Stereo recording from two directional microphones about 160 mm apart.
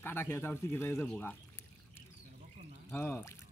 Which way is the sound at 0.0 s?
15° left (ahead or behind).